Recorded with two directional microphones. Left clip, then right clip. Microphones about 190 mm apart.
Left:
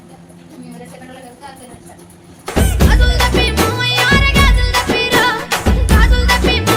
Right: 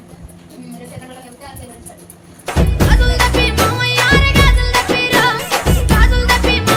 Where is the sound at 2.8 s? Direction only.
Centre (ahead or behind).